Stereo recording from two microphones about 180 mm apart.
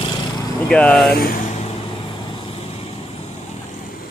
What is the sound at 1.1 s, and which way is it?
Speech, 50° left (ahead or behind).